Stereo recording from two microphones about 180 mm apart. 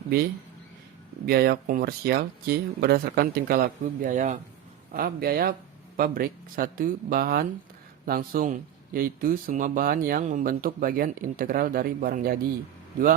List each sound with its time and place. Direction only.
1.3 s speech: 60° right (ahead or behind)
4.9 s speech: 55° right (ahead or behind)